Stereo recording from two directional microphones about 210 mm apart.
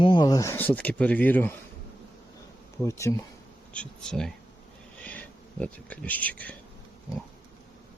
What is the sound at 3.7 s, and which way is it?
Speech, 5° left (ahead or behind).